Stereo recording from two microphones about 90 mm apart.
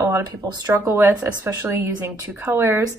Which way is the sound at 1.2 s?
35° right (ahead or behind).